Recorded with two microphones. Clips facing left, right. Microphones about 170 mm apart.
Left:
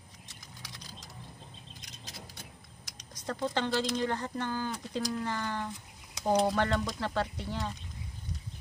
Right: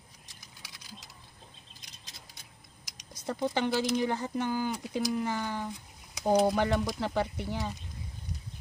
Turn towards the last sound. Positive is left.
turn(degrees=-15)  # may be behind; listen again after turning